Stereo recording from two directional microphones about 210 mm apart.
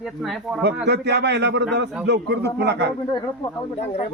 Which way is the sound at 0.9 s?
55° right (ahead or behind).